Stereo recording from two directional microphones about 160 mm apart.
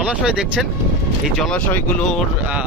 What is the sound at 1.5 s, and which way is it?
Speech, 10° left (ahead or behind).